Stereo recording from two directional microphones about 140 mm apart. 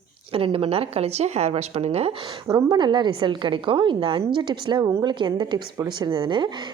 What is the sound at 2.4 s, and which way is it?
A woman's voice, 30° right (ahead or behind).